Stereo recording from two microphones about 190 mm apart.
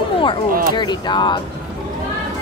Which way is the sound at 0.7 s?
25° left (ahead or behind).